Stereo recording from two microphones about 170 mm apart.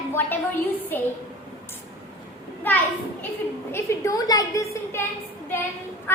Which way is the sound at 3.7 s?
15° left (ahead or behind).